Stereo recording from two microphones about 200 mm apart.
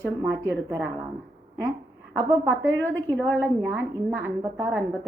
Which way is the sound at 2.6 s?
70° right (ahead or behind).